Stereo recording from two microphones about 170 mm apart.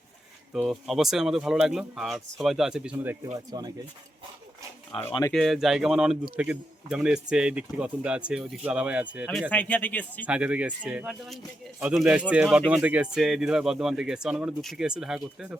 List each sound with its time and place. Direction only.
0.5 s speech: centre (ahead or behind)
3.3 s speech: 25° right (ahead or behind)
4.9 s speech: 10° left (ahead or behind)
5.3 s speech: centre (ahead or behind)
9.5 s speech: 10° left (ahead or behind)
10.2 s speech: 5° right (ahead or behind)